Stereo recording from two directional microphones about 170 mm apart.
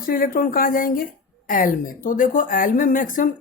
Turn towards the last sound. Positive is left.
turn(degrees=50)  # may be behind; listen again after turning